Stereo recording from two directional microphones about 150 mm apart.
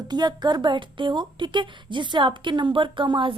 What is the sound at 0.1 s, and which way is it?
A woman's voice, 30° right (ahead or behind).